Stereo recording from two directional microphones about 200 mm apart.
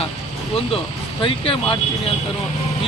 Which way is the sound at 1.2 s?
25° left (ahead or behind).